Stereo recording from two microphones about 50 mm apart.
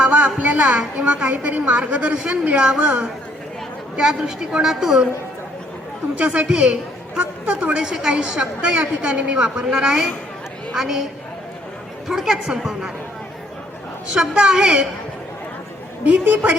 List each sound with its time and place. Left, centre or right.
0.0 s music: right
0.8 s a woman's voice: right
6.1 s a woman's voice: right
12.0 s a woman's voice: centre
14.1 s a woman's voice: centre
16.0 s a woman's voice: right